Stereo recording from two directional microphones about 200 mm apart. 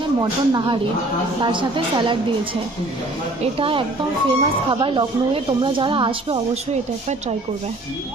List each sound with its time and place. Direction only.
0.2 s speech: 20° right (ahead or behind)
3.4 s speech: 25° right (ahead or behind)